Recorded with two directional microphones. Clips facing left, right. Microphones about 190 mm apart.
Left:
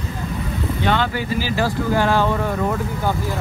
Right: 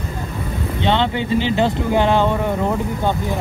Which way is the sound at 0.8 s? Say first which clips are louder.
Right 3 dB; 25° right (ahead or behind).